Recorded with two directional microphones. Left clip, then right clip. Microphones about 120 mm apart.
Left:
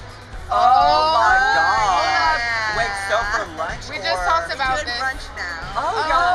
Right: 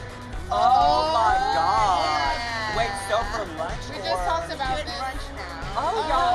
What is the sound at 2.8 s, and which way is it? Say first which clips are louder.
Speech: left 5 dB; 10° left (ahead or behind).